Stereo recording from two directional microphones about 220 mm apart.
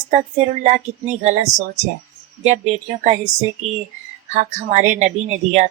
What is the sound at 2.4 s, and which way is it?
Speech, 30° right (ahead or behind).